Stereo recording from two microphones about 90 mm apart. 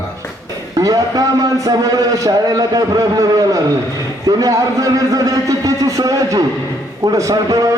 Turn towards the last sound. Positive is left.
turn(degrees=-40)  # may be behind; listen again after turning